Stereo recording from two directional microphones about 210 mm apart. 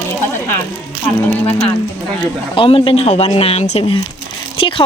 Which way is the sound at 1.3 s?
5° left (ahead or behind).